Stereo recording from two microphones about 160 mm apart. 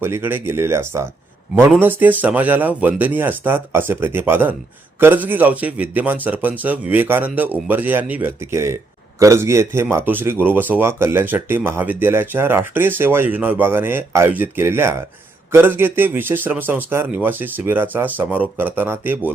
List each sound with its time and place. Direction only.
0.0 s speech: 15° right (ahead or behind)